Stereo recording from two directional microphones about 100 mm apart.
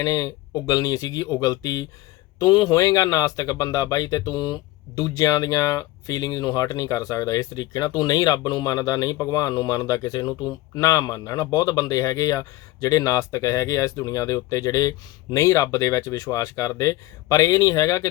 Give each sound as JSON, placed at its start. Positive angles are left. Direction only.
{"t": 0.0, "sound": "speech", "side_deg": 35}